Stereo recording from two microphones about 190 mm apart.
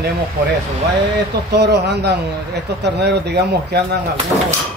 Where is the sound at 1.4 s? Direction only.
60° right (ahead or behind).